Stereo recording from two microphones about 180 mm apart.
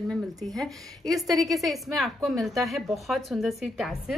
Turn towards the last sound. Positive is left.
turn(degrees=0)  # may be behind; listen again after turning